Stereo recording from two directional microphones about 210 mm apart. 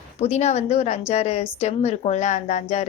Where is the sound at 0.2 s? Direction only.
30° left (ahead or behind).